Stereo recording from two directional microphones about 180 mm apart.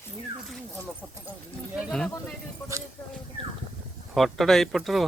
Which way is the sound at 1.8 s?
Centre (ahead or behind).